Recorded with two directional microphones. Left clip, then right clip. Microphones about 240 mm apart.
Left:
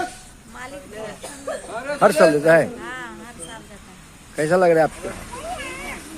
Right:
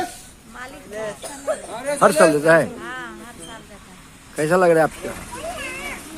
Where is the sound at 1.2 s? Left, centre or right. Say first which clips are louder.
Right 4 dB; right.